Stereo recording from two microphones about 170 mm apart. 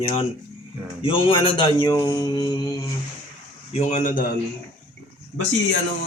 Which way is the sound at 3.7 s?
45° left (ahead or behind).